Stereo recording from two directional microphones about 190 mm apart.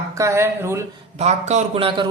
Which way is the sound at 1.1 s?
35° right (ahead or behind).